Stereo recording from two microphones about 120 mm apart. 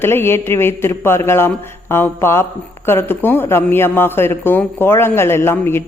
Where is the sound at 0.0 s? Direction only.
20° left (ahead or behind).